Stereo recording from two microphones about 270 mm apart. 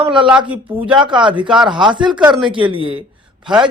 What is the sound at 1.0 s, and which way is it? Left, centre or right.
A man's voice, centre.